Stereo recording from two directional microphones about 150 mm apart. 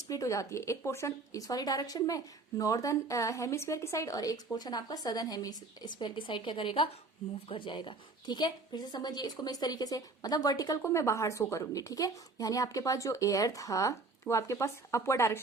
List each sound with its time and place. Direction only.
0.1 s a woman's voice: 20° left (ahead or behind)